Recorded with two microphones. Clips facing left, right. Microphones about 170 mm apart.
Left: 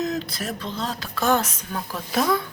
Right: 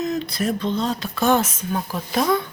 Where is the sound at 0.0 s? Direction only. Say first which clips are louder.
Right 4 dB; centre (ahead or behind).